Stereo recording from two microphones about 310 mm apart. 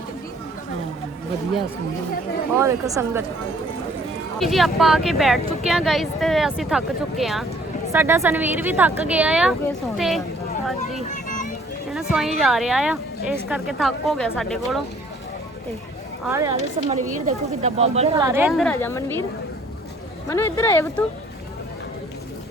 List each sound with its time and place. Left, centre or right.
2.6 s speech: centre
4.4 s speech: centre
11.1 s children playing: left
12.1 s speech: centre
16.2 s speech: centre
16.6 s speech: right; by 19.1 s centre
20.2 s speech: centre